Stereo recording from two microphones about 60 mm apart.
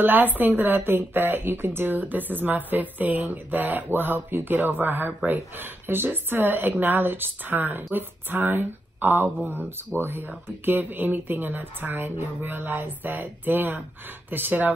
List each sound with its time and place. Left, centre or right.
0.0 s a woman's voice: right